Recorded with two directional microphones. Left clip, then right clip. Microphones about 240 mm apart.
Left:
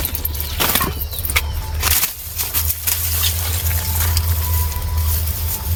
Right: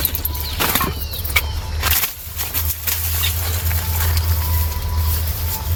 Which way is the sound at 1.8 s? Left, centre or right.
Left.